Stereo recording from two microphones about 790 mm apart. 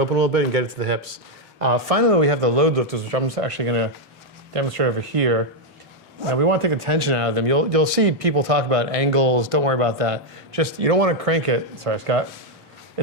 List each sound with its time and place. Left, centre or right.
0.0 s speech: right
1.5 s speech: right